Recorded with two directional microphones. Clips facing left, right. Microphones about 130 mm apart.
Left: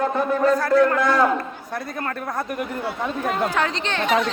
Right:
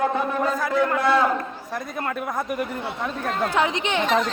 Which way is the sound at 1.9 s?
10° right (ahead or behind).